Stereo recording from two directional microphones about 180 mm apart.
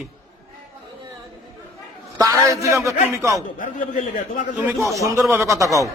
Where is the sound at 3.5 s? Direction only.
50° left (ahead or behind).